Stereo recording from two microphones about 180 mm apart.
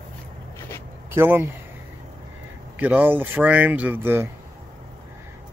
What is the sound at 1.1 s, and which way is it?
Speech, 10° right (ahead or behind).